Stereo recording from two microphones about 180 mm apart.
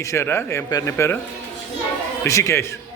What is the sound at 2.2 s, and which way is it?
Speech, 15° left (ahead or behind).